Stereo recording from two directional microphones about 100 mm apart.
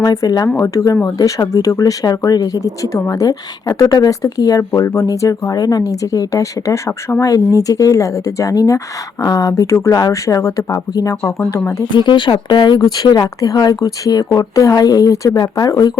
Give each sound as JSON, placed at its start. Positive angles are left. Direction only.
{"t": 0.0, "sound": "speech", "side_deg": 40}
{"t": 11.9, "sound": "speech", "side_deg": 50}